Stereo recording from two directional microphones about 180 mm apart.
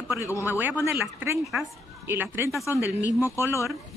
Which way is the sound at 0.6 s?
10° right (ahead or behind).